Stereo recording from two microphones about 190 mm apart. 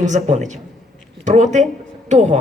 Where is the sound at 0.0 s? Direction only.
40° right (ahead or behind).